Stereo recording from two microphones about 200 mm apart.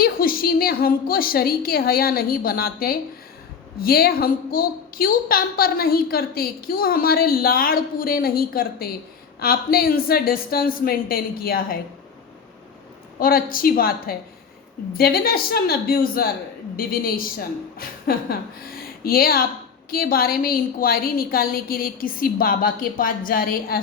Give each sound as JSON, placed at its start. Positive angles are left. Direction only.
{"t": 0.0, "sound": "a woman's voice", "side_deg": 45}
{"t": 13.1, "sound": "a woman's voice", "side_deg": 45}